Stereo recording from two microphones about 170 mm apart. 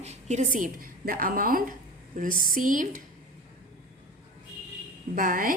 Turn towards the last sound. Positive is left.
turn(degrees=-55)  # may be behind; listen again after turning